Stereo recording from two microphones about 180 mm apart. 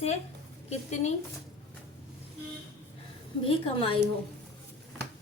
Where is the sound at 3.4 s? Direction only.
30° left (ahead or behind).